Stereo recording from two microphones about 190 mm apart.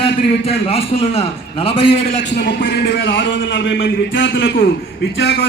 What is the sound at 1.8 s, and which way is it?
A man's voice, 60° left (ahead or behind).